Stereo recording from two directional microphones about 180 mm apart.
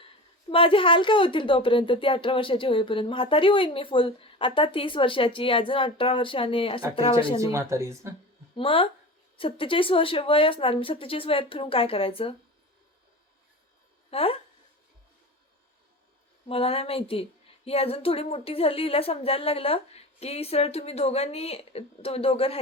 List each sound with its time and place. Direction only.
0.5 s speech: 30° left (ahead or behind)
7.3 s speech: 15° right (ahead or behind)
8.5 s speech: 30° left (ahead or behind)
14.1 s a woman's voice: 30° left (ahead or behind)
16.5 s a woman's voice: 30° left (ahead or behind)